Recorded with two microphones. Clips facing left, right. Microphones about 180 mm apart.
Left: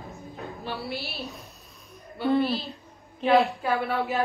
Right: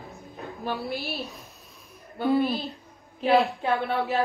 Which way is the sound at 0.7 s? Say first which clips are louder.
Right 3 dB; 15° right (ahead or behind).